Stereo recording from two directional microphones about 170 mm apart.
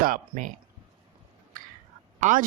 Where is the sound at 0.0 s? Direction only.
55° right (ahead or behind).